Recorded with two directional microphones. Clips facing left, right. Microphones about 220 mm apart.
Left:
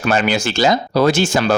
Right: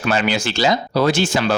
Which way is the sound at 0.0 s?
45° left (ahead or behind).